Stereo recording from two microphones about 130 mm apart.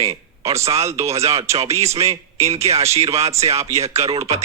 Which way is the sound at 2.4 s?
20° right (ahead or behind).